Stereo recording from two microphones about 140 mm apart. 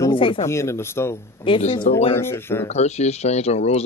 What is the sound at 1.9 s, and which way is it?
Speech, 60° left (ahead or behind).